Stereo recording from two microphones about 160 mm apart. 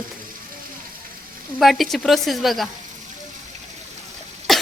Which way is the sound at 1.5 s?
Centre (ahead or behind).